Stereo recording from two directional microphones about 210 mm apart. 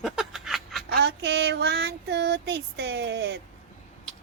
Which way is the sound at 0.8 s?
50° right (ahead or behind).